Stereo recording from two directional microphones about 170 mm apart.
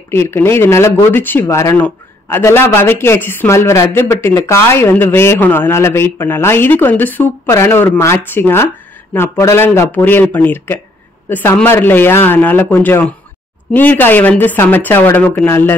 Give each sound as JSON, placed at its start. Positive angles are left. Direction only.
{"t": 0.1, "sound": "a man's voice", "side_deg": 15}